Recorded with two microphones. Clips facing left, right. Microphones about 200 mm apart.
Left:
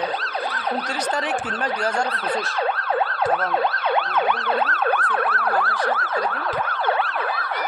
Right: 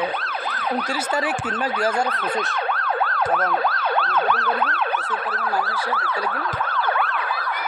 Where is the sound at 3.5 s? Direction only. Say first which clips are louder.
Left 1 dB; 25° left (ahead or behind).